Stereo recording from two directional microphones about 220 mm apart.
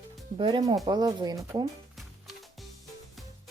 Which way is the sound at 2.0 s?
Centre (ahead or behind).